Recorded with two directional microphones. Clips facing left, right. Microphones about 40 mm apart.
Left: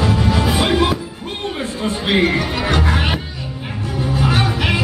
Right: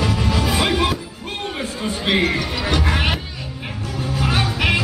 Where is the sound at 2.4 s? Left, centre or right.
Centre.